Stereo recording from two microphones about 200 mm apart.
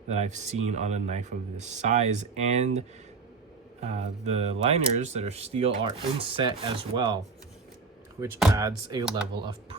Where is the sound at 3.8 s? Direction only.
35° right (ahead or behind).